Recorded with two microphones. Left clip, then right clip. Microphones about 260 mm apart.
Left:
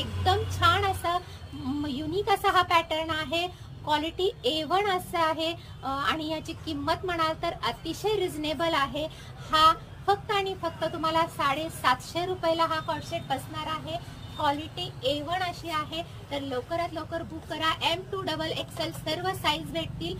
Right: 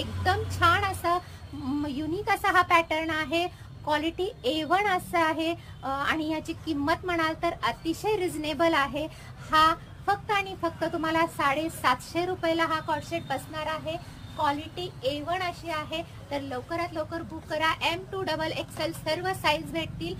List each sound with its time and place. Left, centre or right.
0.2 s music: centre
1.9 s speech: centre